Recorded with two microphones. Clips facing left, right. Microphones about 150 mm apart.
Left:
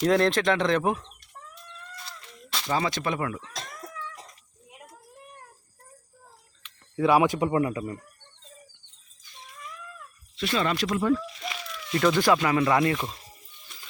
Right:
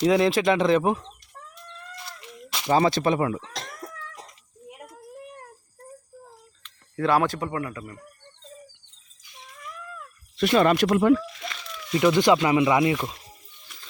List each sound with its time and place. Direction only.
0.0 s speech: 5° right (ahead or behind)
2.6 s speech: 30° right (ahead or behind)
6.6 s speech: 5° left (ahead or behind)
10.3 s speech: 50° right (ahead or behind)
11.9 s speech: 15° right (ahead or behind)